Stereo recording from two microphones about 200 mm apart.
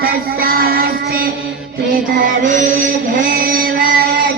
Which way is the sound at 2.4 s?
40° right (ahead or behind).